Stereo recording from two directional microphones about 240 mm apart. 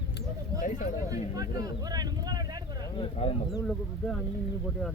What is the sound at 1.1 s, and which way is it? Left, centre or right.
Speech, centre.